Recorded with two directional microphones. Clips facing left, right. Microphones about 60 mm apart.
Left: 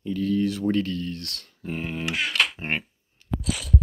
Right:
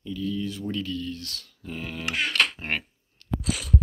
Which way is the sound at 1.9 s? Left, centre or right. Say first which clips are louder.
Even; left.